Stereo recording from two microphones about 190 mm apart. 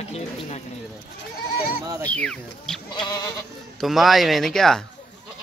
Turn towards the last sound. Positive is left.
turn(degrees=0)  # may be behind; listen again after turning